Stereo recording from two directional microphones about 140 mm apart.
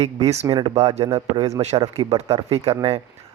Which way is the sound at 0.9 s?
45° right (ahead or behind).